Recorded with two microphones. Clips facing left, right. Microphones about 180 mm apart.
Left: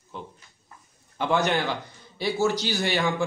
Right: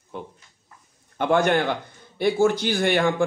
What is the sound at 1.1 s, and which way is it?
A man's voice, 55° right (ahead or behind).